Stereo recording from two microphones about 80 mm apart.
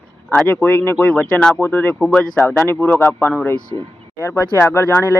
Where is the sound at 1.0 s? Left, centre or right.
Centre.